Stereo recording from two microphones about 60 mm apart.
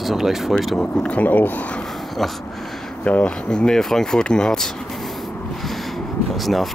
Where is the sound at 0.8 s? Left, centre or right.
Centre.